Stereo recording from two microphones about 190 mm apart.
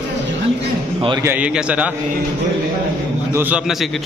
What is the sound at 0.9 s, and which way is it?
Speech, 25° right (ahead or behind).